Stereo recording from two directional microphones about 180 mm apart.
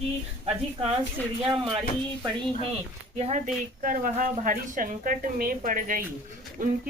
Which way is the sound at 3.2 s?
40° right (ahead or behind).